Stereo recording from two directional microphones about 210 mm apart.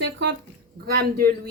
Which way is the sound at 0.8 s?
45° right (ahead or behind).